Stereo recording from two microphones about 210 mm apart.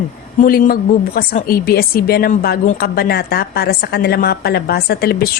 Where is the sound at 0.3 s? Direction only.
40° left (ahead or behind).